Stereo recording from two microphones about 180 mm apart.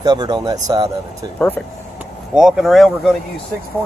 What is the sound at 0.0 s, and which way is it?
Speech, 25° right (ahead or behind).